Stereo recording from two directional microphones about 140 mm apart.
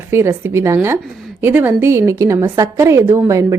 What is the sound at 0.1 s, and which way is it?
A woman's voice, 15° right (ahead or behind).